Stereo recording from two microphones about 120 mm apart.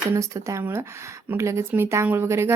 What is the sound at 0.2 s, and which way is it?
Speech, 25° right (ahead or behind).